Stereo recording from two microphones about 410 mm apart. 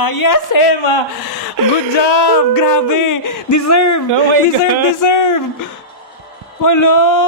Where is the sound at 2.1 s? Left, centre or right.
Left.